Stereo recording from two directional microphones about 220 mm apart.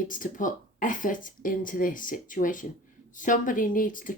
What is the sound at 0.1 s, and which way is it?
Speech, 35° left (ahead or behind).